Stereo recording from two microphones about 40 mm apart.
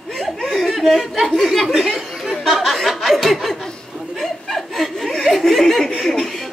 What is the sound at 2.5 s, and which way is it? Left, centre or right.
Chuckle, centre.